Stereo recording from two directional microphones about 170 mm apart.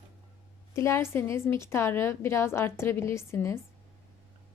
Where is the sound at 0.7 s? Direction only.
15° left (ahead or behind).